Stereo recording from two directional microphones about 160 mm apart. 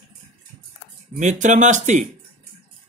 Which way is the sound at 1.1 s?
50° right (ahead or behind).